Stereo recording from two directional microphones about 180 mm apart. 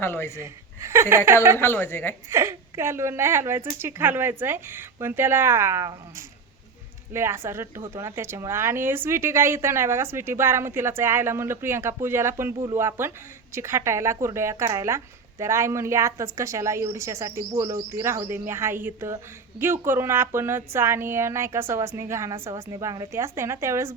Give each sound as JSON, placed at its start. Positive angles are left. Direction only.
{"t": 0.0, "sound": "a woman's voice", "side_deg": 15}
{"t": 0.3, "sound": "speech", "side_deg": -15}
{"t": 1.5, "sound": "a woman's voice", "side_deg": 10}
{"t": 2.3, "sound": "speech", "side_deg": -15}